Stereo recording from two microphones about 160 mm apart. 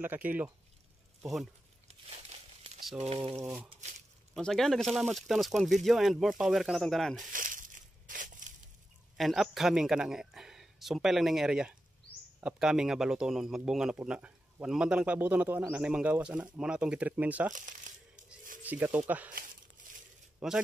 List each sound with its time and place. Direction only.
0.0 s speech: 10° right (ahead or behind)
1.9 s crumpling: 40° right (ahead or behind)
3.4 s speech: 15° right (ahead or behind)
3.7 s a sound: 45° right (ahead or behind)
4.4 s speech: centre (ahead or behind)
7.2 s a sound: 55° right (ahead or behind)
8.1 s crushing: 55° right (ahead or behind)
9.1 s speech: centre (ahead or behind)
17.5 s crumpling: 55° right (ahead or behind)
18.6 s speech: 10° right (ahead or behind)
20.3 s a man's voice: 5° right (ahead or behind)